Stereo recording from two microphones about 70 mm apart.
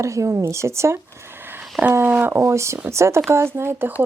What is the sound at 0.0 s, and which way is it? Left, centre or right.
Speech, right.